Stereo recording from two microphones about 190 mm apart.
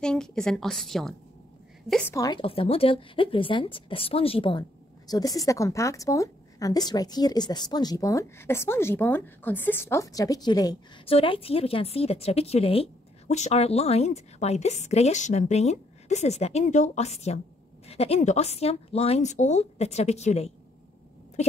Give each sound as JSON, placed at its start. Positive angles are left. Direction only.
{"t": 0.0, "sound": "a woman's voice", "side_deg": 5}
{"t": 2.1, "sound": "a woman's voice", "side_deg": 20}